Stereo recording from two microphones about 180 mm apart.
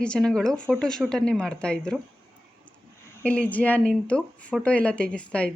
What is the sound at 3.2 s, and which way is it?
Speech, 10° left (ahead or behind).